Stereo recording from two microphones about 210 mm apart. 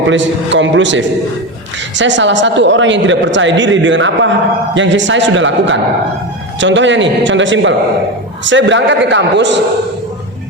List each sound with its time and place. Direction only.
0.1 s a woman's voice: 60° right (ahead or behind)